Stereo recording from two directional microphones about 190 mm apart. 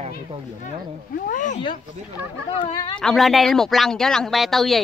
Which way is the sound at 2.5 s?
25° left (ahead or behind).